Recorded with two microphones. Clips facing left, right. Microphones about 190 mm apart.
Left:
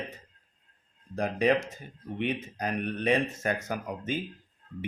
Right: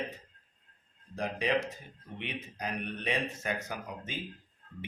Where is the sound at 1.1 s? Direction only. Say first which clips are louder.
Left 5 dB; 45° left (ahead or behind).